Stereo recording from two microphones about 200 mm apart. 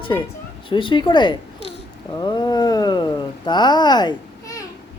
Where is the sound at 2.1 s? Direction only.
20° left (ahead or behind).